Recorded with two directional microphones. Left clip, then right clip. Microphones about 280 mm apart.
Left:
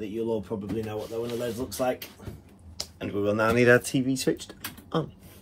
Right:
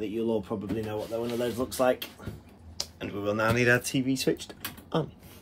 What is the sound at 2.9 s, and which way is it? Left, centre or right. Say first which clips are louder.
Speech: left 4 dB; centre.